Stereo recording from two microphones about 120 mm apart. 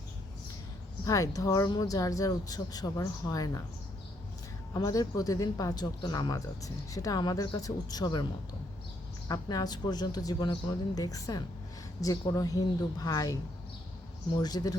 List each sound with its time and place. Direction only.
1.0 s speech: 30° left (ahead or behind)
4.7 s speech: 30° left (ahead or behind)
9.3 s speech: 30° left (ahead or behind)